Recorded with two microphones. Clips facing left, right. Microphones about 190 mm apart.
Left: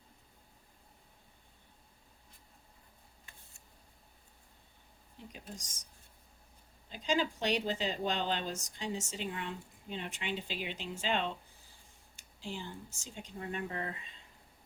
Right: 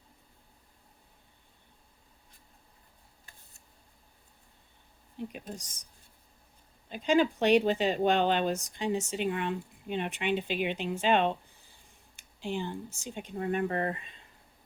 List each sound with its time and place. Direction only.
6.9 s speech: 60° right (ahead or behind)